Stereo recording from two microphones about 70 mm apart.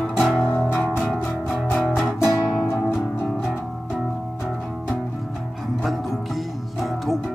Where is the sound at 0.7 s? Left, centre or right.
Left.